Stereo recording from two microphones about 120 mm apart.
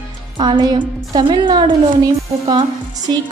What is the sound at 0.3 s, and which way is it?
A woman's voice, 40° right (ahead or behind).